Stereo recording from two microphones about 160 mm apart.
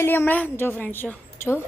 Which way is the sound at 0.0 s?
15° left (ahead or behind).